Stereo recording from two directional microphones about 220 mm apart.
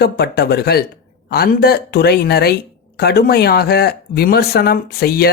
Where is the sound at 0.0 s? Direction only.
45° left (ahead or behind).